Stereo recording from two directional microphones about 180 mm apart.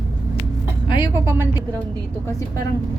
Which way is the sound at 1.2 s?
10° right (ahead or behind).